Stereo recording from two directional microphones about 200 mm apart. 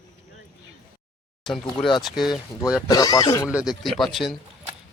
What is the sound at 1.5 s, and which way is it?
Speech, centre (ahead or behind).